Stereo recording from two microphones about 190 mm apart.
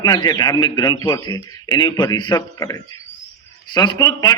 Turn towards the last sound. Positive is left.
turn(degrees=20)  # may be behind; listen again after turning